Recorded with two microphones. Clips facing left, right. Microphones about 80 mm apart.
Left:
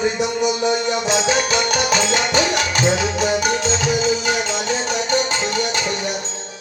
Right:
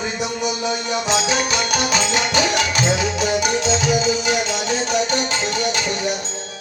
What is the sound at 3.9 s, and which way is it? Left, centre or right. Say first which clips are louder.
Music: left 1 dB; centre.